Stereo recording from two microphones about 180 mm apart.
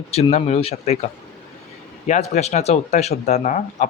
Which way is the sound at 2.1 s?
40° left (ahead or behind).